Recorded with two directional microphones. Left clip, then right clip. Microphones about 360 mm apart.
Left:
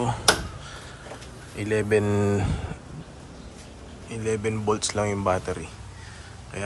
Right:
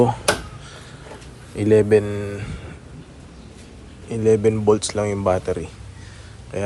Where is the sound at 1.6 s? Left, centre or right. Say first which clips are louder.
Right 8 dB; centre.